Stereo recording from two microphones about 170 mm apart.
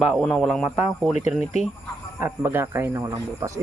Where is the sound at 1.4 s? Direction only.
45° left (ahead or behind).